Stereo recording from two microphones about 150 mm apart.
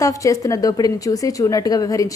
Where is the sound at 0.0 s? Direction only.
20° left (ahead or behind).